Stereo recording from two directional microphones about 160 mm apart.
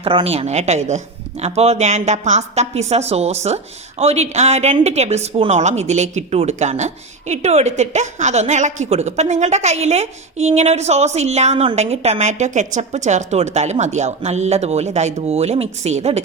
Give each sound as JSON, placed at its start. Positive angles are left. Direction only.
{"t": 0.0, "sound": "speech", "side_deg": -35}